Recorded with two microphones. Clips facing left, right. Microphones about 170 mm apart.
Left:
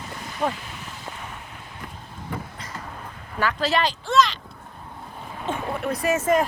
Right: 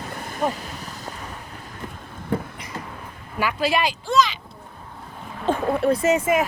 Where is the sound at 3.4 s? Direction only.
10° right (ahead or behind).